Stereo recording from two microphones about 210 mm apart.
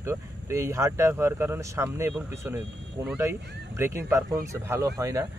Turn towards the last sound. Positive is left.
turn(degrees=-15)  # may be behind; listen again after turning